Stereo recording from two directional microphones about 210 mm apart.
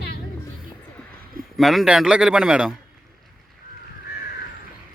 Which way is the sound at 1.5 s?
Centre (ahead or behind).